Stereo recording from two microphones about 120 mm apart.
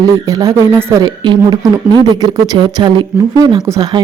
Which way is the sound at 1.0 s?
40° right (ahead or behind).